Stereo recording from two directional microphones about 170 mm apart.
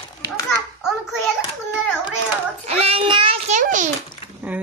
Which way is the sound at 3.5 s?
45° right (ahead or behind).